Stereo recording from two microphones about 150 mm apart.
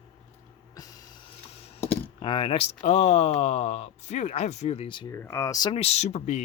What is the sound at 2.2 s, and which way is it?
Speech, 35° left (ahead or behind).